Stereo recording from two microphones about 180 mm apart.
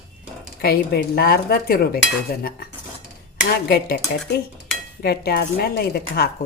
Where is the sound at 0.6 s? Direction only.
60° left (ahead or behind).